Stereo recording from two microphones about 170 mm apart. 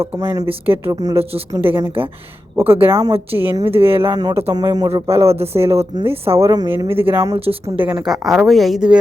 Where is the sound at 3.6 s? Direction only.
35° right (ahead or behind).